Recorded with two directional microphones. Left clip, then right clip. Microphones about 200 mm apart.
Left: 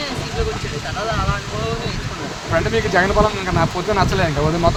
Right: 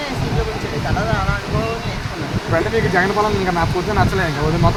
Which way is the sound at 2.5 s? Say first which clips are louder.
Even; 40° left (ahead or behind).